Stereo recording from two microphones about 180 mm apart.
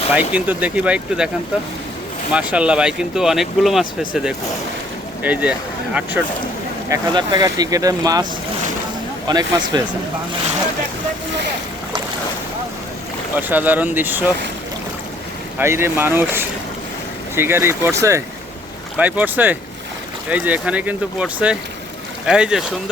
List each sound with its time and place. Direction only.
0.1 s speech: 10° right (ahead or behind)
2.3 s speech: 5° right (ahead or behind)
6.9 s speech: 25° right (ahead or behind)
13.5 s speech: 10° right (ahead or behind)
15.5 s speech: 15° right (ahead or behind)